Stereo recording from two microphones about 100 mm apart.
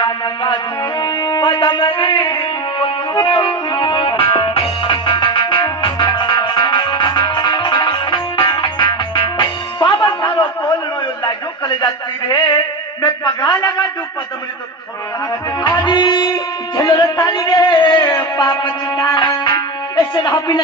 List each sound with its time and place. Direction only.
0.0 s music: 50° left (ahead or behind)
11.2 s a sound: 45° left (ahead or behind)
12.3 s speech: 50° left (ahead or behind)
15.6 s music: 45° left (ahead or behind)